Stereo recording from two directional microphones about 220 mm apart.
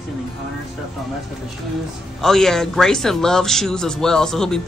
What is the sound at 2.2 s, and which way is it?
Speech, centre (ahead or behind).